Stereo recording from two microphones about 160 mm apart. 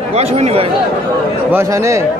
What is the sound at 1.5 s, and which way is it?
Speech, 20° right (ahead or behind).